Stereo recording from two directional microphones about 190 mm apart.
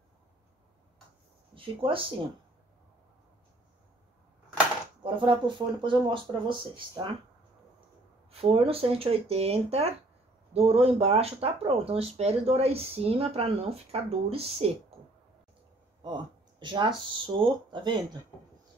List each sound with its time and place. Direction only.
1.5 s speech: 30° right (ahead or behind)
5.0 s speech: 25° right (ahead or behind)
8.3 s speech: 30° right (ahead or behind)
16.0 s speech: 25° right (ahead or behind)
18.3 s speech: centre (ahead or behind)